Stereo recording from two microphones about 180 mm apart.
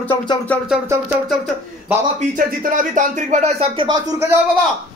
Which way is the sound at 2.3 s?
50° right (ahead or behind).